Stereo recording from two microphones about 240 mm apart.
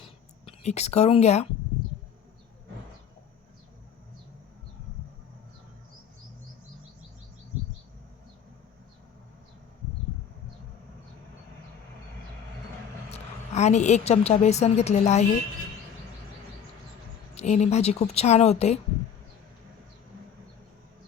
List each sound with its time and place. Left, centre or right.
0.0 s a sound: left
13.1 s a woman's voice: left
17.3 s speech: left